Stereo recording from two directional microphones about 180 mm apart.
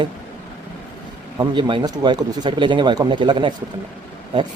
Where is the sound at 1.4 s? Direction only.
25° right (ahead or behind).